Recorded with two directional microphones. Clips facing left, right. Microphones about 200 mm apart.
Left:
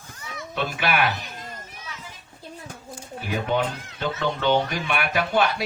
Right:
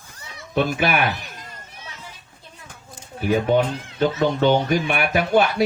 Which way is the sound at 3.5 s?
45° right (ahead or behind).